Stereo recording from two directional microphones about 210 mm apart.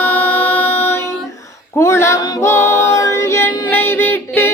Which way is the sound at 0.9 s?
10° left (ahead or behind).